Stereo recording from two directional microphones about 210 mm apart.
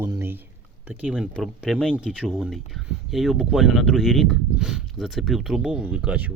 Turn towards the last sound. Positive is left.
turn(degrees=-5)  # may be behind; listen again after turning